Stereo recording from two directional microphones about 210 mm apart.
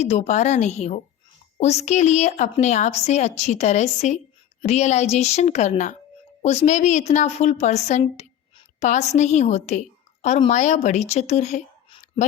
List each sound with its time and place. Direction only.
0.0 s a woman's voice: 30° left (ahead or behind)